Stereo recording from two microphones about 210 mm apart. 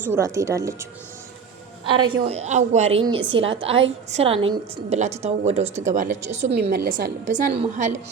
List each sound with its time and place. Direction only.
0.0 s speech: 10° right (ahead or behind)
1.9 s a woman's voice: 25° right (ahead or behind)
6.5 s a woman's voice: 50° right (ahead or behind); by 7.9 s 30° right (ahead or behind)